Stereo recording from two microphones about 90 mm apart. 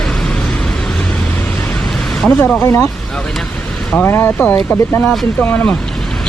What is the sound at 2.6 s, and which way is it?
Speech, 35° left (ahead or behind).